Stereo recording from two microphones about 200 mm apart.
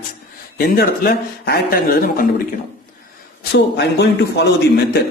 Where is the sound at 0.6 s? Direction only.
50° left (ahead or behind).